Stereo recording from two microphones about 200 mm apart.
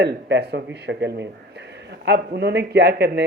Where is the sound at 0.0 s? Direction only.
60° right (ahead or behind).